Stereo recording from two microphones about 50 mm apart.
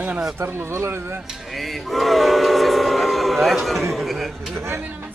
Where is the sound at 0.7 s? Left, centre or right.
Right.